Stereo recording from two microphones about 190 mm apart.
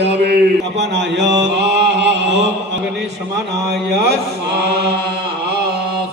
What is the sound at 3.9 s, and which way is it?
A man's voice, 60° right (ahead or behind).